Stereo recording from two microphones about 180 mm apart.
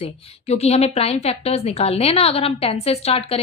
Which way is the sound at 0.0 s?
35° left (ahead or behind).